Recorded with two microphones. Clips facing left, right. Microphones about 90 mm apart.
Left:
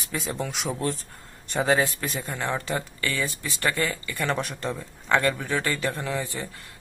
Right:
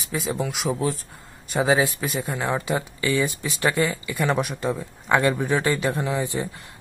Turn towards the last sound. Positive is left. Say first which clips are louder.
# right 5 dB
turn(degrees=-20)  # may be behind; listen again after turning